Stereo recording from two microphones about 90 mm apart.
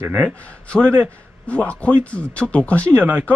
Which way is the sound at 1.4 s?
15° left (ahead or behind).